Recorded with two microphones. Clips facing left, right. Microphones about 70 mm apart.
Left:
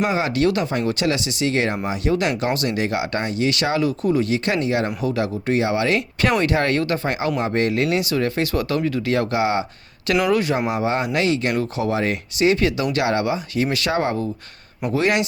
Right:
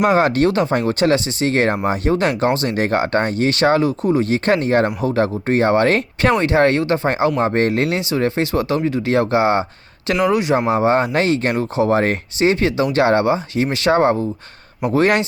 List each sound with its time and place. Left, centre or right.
0.0 s speech: right
6.4 s speech: right
14.8 s speech: right